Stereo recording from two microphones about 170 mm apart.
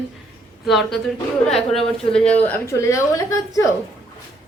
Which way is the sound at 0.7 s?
Centre (ahead or behind).